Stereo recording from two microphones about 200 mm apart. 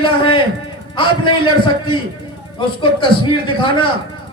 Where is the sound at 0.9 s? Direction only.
25° left (ahead or behind).